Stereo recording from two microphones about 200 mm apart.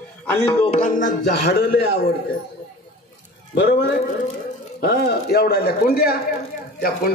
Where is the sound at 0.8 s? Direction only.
40° left (ahead or behind).